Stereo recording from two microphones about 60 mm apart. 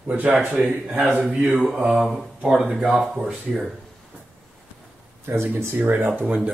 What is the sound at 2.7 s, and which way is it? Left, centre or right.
Mantra, centre.